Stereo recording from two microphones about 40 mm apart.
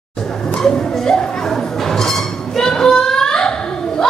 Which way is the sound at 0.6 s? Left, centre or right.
Centre.